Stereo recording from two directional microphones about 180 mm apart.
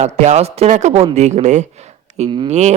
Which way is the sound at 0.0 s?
40° right (ahead or behind).